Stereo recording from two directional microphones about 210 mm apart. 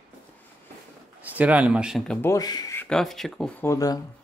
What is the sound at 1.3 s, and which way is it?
Speech, 5° right (ahead or behind).